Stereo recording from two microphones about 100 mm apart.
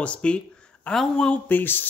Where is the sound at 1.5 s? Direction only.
20° left (ahead or behind).